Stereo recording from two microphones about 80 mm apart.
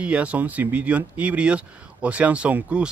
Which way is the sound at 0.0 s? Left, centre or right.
Centre.